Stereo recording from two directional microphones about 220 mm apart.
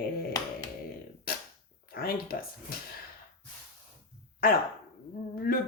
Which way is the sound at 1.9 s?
45° left (ahead or behind).